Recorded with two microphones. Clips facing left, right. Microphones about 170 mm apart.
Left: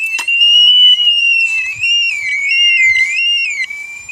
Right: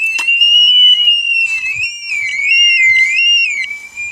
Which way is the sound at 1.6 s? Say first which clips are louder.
Left 3 dB; 15° right (ahead or behind).